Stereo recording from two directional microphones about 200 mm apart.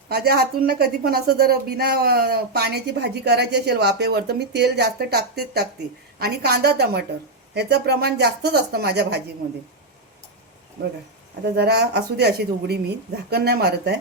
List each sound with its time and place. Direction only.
0.1 s a woman's voice: 50° right (ahead or behind)
11.5 s a woman's voice: 55° right (ahead or behind)